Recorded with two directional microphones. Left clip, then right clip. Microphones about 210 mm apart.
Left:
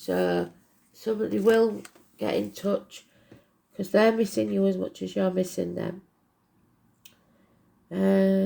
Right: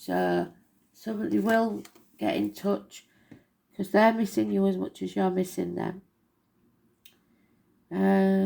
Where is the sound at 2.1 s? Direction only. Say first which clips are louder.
Left 1 dB; 35° left (ahead or behind).